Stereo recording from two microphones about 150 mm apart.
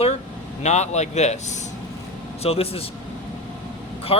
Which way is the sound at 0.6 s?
50° left (ahead or behind).